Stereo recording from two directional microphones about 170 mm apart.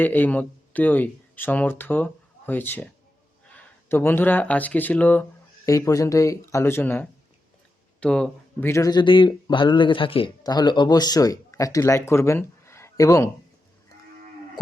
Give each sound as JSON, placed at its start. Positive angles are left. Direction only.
{"t": 0.0, "sound": "speech", "side_deg": 10}
{"t": 8.7, "sound": "speech", "side_deg": 20}